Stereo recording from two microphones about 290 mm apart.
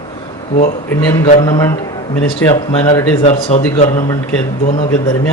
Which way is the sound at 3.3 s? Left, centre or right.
Left.